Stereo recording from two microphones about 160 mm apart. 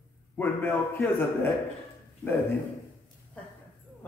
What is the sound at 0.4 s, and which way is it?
A man's voice, 10° left (ahead or behind).